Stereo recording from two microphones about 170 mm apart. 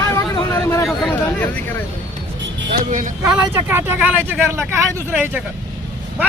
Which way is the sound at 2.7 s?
50° right (ahead or behind).